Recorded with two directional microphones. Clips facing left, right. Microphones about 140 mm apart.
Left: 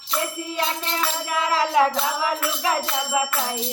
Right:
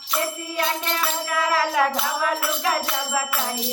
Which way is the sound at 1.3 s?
20° left (ahead or behind).